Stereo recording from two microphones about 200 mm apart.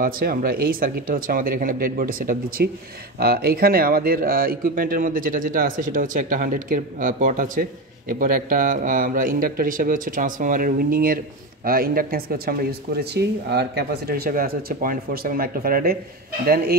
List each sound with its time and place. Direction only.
0.0 s a man's voice: 45° right (ahead or behind)